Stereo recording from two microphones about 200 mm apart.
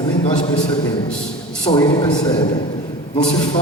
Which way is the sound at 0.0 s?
20° left (ahead or behind).